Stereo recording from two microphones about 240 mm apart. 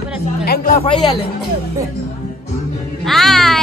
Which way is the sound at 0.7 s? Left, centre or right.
Left.